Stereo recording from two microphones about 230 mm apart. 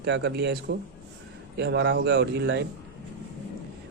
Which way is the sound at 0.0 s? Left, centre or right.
Right.